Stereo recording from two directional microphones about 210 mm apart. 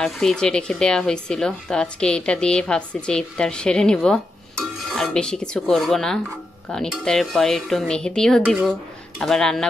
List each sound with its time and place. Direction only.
0.0 s speech: centre (ahead or behind)